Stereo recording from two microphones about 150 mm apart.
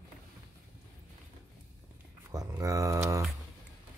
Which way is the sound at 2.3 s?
25° right (ahead or behind).